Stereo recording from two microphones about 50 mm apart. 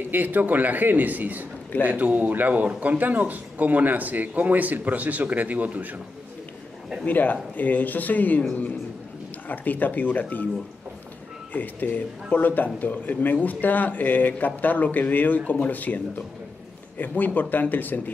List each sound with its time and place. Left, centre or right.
0.1 s a man's voice: right
7.1 s speech: left
9.5 s speech: left
11.5 s speech: left